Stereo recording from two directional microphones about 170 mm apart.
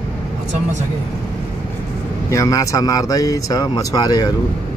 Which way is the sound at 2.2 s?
20° left (ahead or behind).